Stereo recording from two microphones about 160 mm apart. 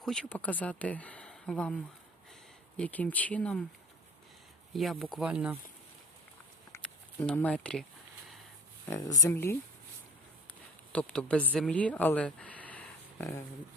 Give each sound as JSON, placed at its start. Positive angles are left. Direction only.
{"t": 0.0, "sound": "speech", "side_deg": 5}
{"t": 4.7, "sound": "speech", "side_deg": 0}
{"t": 6.7, "sound": "a sound", "side_deg": 10}
{"t": 8.9, "sound": "speech", "side_deg": 20}
{"t": 10.9, "sound": "speech", "side_deg": 5}